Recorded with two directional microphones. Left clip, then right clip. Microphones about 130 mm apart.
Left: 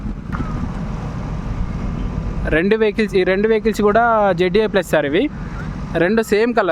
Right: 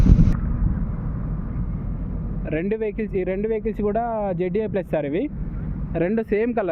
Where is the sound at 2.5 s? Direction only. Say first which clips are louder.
Left 9 dB; 50° left (ahead or behind).